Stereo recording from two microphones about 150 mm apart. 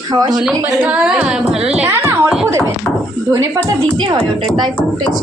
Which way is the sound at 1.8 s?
15° right (ahead or behind).